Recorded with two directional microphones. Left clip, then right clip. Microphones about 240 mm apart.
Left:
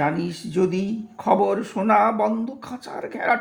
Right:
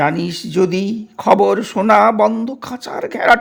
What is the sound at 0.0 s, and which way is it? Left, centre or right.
Speech, right.